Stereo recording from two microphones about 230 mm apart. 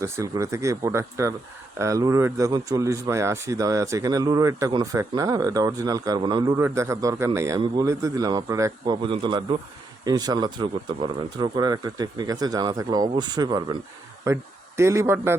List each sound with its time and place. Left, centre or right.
0.0 s speech: centre